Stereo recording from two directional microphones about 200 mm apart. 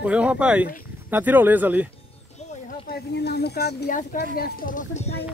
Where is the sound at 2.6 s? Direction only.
50° left (ahead or behind).